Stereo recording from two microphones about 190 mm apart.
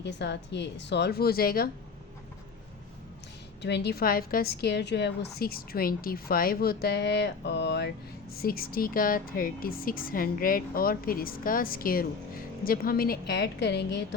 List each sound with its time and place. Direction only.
0.0 s a woman's voice: 65° left (ahead or behind)
3.6 s a woman's voice: 65° left (ahead or behind)
8.4 s a woman's voice: 50° left (ahead or behind)